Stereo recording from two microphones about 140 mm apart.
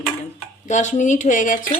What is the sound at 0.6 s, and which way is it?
A woman's voice, 60° left (ahead or behind).